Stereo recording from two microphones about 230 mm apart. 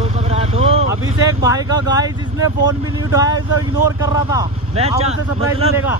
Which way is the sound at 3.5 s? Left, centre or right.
Left.